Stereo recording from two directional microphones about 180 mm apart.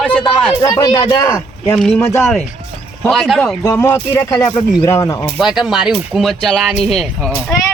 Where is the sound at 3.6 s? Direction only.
20° left (ahead or behind).